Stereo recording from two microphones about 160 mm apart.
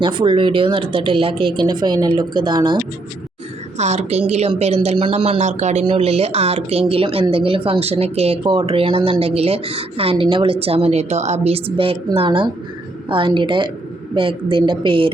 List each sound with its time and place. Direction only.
0.0 s speech: 30° right (ahead or behind)
3.8 s a woman's voice: 45° right (ahead or behind)
5.8 s speech: 35° right (ahead or behind)